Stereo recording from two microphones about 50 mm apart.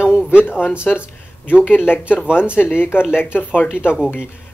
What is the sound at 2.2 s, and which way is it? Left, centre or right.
Speech, right.